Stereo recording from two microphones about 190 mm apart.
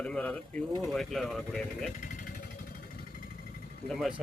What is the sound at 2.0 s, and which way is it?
Vehicle, 45° left (ahead or behind).